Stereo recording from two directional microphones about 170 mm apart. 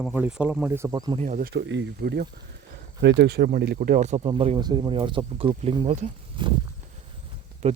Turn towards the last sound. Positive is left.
turn(degrees=-35)  # may be behind; listen again after turning